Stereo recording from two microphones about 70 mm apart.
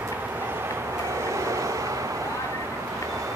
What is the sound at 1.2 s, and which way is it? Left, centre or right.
Vehicle, right.